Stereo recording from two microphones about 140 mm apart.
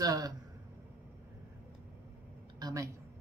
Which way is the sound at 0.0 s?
25° right (ahead or behind).